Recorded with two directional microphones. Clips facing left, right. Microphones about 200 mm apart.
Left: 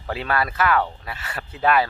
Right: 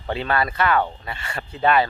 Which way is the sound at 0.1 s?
5° left (ahead or behind).